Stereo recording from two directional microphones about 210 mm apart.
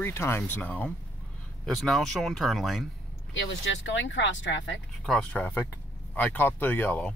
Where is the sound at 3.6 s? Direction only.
60° left (ahead or behind).